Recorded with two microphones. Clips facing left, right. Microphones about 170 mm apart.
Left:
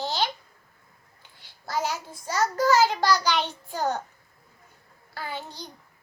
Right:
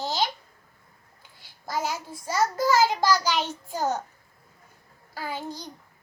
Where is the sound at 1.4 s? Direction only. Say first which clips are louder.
Left 1 dB; 10° right (ahead or behind).